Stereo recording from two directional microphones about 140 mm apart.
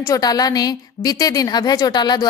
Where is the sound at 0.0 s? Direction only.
25° left (ahead or behind).